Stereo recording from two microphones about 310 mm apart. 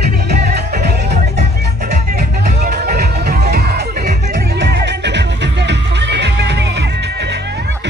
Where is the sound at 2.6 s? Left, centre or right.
Right.